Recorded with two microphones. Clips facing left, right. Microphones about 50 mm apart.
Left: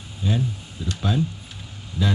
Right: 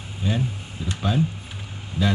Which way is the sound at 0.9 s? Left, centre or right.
Centre.